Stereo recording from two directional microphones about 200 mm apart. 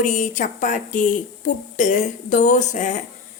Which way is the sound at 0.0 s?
40° left (ahead or behind).